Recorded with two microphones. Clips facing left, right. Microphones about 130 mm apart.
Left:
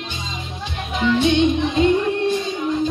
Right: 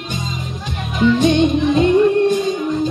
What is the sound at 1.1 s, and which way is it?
Music, 40° right (ahead or behind).